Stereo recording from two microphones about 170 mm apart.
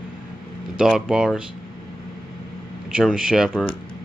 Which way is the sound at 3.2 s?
5° right (ahead or behind).